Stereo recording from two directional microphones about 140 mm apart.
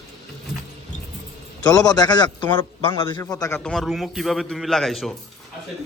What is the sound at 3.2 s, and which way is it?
Speech, 25° left (ahead or behind).